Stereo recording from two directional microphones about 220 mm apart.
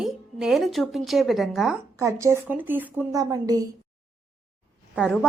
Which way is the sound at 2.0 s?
15° right (ahead or behind).